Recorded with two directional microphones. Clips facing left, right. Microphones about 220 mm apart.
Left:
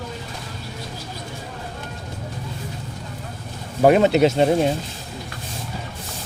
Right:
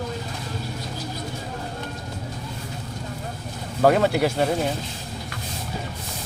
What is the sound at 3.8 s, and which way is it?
Speech, 20° left (ahead or behind).